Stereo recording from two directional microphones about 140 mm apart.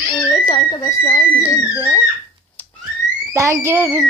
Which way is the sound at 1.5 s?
25° left (ahead or behind).